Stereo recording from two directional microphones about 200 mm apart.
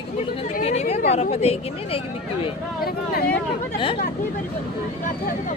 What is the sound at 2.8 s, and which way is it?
Speech, 50° left (ahead or behind).